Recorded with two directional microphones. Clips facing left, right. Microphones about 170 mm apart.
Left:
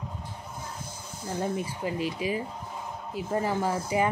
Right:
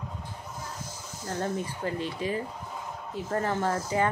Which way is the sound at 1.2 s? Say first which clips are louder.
Left 1 dB; 10° left (ahead or behind).